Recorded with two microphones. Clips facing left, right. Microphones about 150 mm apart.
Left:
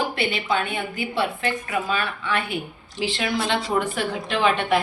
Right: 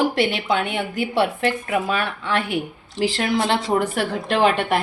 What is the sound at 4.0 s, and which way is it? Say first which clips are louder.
Speech: right 4 dB; 60° right (ahead or behind).